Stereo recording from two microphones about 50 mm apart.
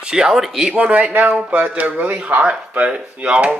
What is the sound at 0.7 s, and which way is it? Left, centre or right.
Speech, right.